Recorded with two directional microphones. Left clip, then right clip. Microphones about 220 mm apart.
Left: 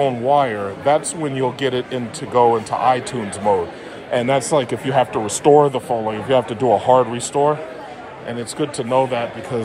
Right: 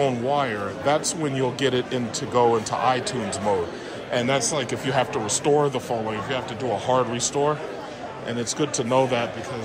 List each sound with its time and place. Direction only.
0.0 s speech: 5° right (ahead or behind)